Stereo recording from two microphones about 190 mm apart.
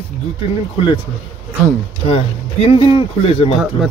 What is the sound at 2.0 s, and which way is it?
Speech, 30° left (ahead or behind).